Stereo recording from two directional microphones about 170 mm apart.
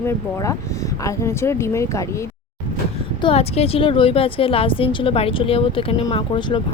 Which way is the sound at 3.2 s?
35° left (ahead or behind).